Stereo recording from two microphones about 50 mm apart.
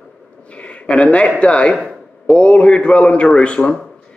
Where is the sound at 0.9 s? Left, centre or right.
Left.